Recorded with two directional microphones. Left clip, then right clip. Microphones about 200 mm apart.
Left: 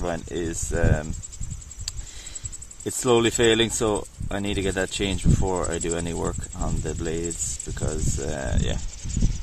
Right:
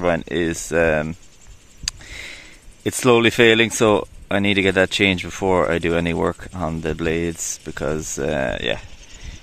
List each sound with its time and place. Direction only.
0.0 s speech: 30° right (ahead or behind)
1.9 s a sound: 30° right (ahead or behind)
2.8 s speech: 30° right (ahead or behind)